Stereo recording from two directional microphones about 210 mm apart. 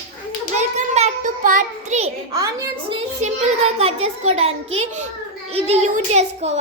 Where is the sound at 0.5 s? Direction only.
30° right (ahead or behind).